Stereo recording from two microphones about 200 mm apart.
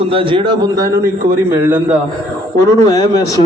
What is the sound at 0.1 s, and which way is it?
Speech, 25° right (ahead or behind).